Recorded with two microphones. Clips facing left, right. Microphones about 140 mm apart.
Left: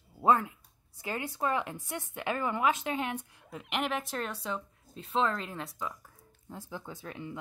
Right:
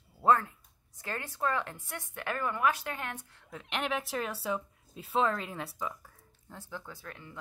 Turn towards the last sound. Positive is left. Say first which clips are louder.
# left 5 dB
turn(degrees=20)  # may be behind; listen again after turning